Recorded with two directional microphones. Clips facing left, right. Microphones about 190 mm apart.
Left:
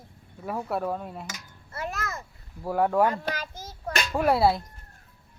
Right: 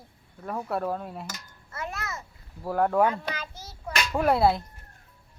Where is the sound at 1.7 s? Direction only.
35° left (ahead or behind).